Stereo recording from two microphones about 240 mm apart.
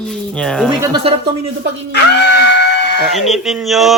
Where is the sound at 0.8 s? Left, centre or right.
Centre.